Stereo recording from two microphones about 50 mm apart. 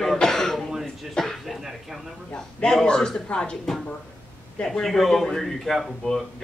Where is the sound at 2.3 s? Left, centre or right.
Centre.